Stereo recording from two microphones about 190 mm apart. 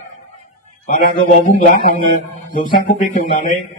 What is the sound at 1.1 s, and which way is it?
A man's voice, 50° left (ahead or behind).